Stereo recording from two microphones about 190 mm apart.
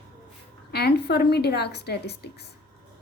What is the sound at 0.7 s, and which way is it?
A woman's voice, 55° left (ahead or behind).